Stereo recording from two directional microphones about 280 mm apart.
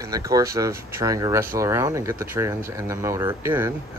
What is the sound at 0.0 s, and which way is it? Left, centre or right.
Speech, centre.